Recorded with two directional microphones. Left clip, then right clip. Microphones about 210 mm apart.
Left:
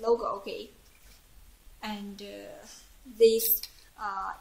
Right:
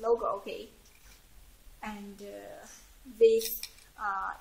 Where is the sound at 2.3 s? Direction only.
20° left (ahead or behind).